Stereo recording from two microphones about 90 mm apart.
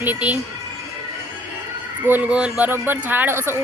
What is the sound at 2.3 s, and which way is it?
Speech, 10° right (ahead or behind).